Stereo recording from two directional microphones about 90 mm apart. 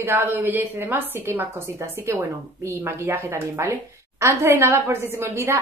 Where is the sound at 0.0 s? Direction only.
25° right (ahead or behind).